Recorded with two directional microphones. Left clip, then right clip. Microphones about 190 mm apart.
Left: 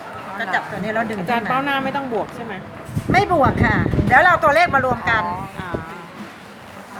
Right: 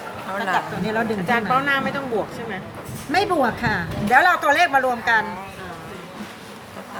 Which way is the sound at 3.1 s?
10° left (ahead or behind).